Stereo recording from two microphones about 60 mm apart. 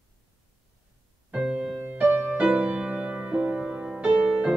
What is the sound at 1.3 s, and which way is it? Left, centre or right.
Music, centre.